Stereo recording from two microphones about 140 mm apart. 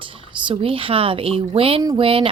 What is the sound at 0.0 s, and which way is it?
Speech, 40° right (ahead or behind).